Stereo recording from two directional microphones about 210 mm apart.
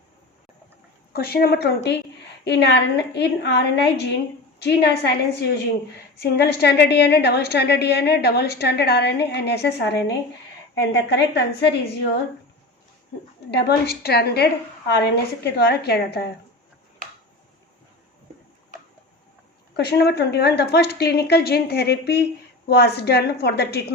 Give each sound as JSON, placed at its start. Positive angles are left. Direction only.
{"t": 1.1, "sound": "a woman's voice", "side_deg": 50}
{"t": 13.5, "sound": "a woman's voice", "side_deg": 50}
{"t": 19.7, "sound": "a woman's voice", "side_deg": 50}